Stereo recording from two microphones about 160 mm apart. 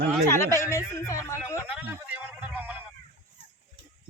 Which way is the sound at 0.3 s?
15° left (ahead or behind).